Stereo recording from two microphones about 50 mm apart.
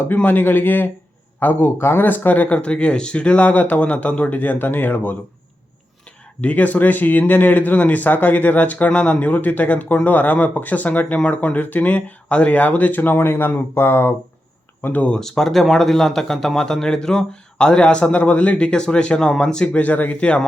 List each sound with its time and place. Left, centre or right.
0.1 s speech: left
6.4 s speech: left
15.2 s a man's voice: centre; by 18.7 s left
18.7 s a man's voice: centre
19.8 s speech: left